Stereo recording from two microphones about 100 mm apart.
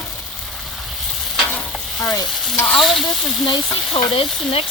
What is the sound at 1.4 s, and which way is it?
Stir, 15° left (ahead or behind).